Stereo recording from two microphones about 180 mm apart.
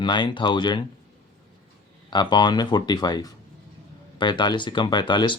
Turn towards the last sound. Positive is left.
turn(degrees=25)  # may be behind; listen again after turning